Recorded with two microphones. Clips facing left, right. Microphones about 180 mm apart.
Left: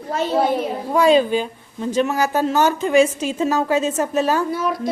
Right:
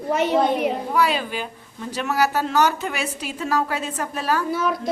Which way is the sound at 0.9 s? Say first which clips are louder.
Left 13 dB; 25° left (ahead or behind).